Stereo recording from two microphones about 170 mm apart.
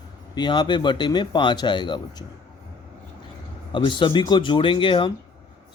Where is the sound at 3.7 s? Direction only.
30° left (ahead or behind).